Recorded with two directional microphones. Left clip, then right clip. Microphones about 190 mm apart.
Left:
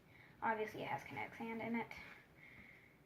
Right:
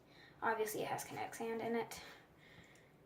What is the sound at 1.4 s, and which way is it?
Speech, 20° left (ahead or behind).